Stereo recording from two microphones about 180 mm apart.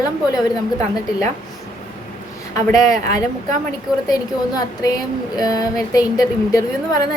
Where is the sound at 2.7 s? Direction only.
20° left (ahead or behind).